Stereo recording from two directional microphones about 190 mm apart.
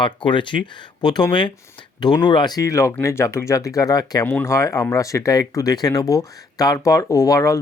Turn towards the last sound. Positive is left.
turn(degrees=15)  # may be behind; listen again after turning